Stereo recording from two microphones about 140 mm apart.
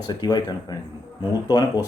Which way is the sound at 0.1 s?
30° left (ahead or behind).